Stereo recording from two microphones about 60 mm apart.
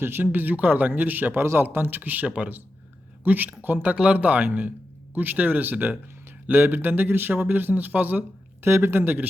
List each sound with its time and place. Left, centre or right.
0.0 s a man's voice: right
3.9 s a man's voice: right
8.6 s a man's voice: right